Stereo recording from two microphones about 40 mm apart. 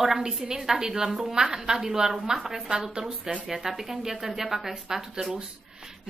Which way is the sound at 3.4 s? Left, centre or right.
Centre.